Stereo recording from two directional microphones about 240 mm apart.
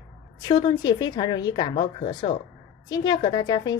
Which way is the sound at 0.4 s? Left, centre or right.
Centre.